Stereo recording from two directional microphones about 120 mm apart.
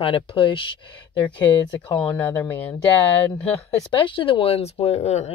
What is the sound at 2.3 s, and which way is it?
Speech, 15° left (ahead or behind).